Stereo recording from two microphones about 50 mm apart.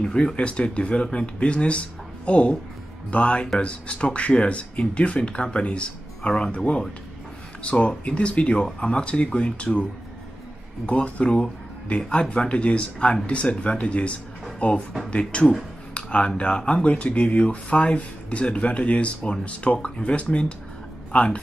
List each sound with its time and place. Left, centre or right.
0.0 s speech: centre
10.9 s speech: left